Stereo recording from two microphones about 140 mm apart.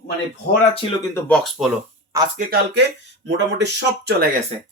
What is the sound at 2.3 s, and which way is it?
Speech, 70° right (ahead or behind).